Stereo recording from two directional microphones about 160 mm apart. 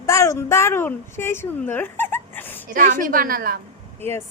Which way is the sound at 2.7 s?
55° right (ahead or behind).